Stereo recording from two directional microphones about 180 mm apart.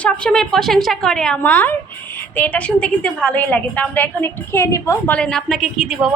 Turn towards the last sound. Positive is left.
turn(degrees=-5)  # may be behind; listen again after turning